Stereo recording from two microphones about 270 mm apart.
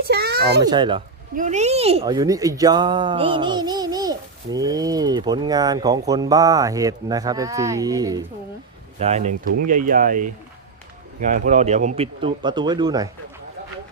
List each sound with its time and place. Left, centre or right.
0.0 s a sound: right
0.6 s speech: centre
9.0 s speech: right